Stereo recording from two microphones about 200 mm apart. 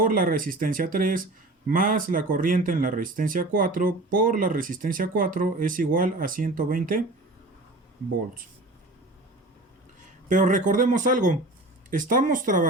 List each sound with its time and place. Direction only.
0.0 s speech: 45° right (ahead or behind)
10.2 s speech: 40° right (ahead or behind)